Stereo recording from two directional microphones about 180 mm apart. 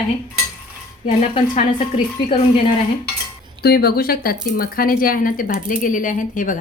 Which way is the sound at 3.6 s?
60° left (ahead or behind).